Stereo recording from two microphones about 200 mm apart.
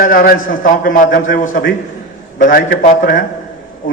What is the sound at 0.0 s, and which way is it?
A man's voice, 50° left (ahead or behind).